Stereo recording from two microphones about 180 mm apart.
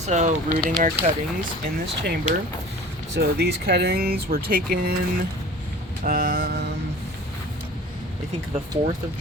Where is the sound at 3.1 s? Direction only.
65° right (ahead or behind).